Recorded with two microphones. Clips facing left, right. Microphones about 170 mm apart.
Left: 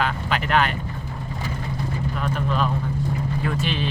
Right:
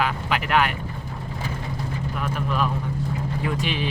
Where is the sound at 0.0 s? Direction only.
10° right (ahead or behind).